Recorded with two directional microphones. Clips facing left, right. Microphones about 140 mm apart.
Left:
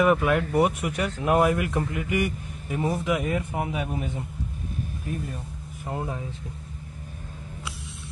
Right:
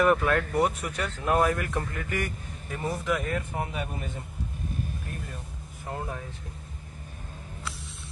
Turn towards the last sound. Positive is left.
turn(degrees=15)  # may be behind; listen again after turning